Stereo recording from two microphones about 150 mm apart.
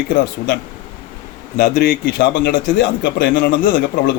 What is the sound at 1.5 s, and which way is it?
A man's voice, 90° left.